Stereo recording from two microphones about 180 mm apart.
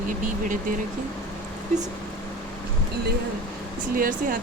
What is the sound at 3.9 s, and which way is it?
Speech, 50° right (ahead or behind).